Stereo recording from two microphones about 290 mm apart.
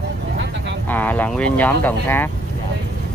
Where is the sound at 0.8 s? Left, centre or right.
Centre.